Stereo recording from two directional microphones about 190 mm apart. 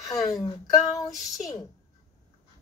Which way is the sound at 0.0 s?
20° left (ahead or behind).